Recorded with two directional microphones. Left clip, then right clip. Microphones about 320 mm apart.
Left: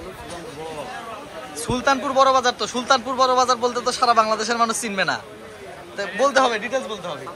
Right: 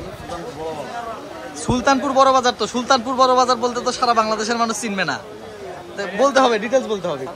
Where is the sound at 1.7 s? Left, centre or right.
Centre.